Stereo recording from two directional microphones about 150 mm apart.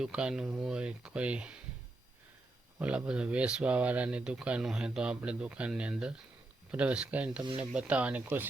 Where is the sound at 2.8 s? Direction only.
10° right (ahead or behind).